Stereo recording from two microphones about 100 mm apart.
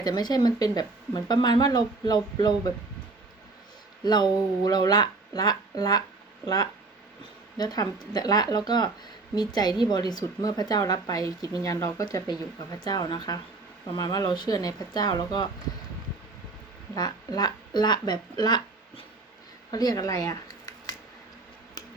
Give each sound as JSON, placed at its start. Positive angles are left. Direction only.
{"t": 0.0, "sound": "speech", "side_deg": 45}
{"t": 4.0, "sound": "speech", "side_deg": 45}
{"t": 16.9, "sound": "speech", "side_deg": 40}
{"t": 19.7, "sound": "speech", "side_deg": 40}